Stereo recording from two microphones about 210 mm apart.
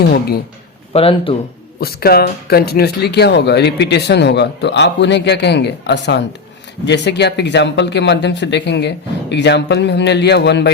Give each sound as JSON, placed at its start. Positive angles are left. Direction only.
{"t": 0.9, "sound": "speech", "side_deg": 25}
{"t": 1.8, "sound": "speech", "side_deg": 45}